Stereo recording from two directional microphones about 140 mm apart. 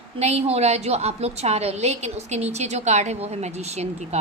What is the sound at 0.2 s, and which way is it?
A woman's voice, 50° right (ahead or behind).